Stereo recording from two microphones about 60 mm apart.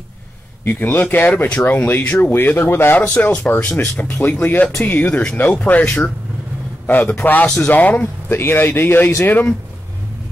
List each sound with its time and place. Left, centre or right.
0.7 s speech: left
3.0 s speech: left
7.1 s speech: left
8.3 s speech: left